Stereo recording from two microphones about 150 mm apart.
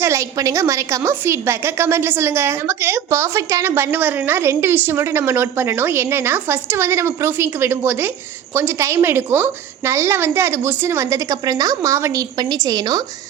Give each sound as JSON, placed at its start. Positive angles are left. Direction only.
{"t": 0.0, "sound": "a woman's voice", "side_deg": -20}